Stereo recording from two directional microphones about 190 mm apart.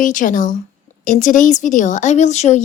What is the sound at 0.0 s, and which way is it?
A woman's voice, 40° left (ahead or behind).